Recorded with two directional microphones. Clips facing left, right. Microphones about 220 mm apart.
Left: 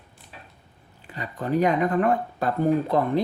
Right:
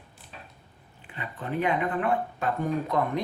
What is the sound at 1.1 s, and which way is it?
Speech, 40° left (ahead or behind).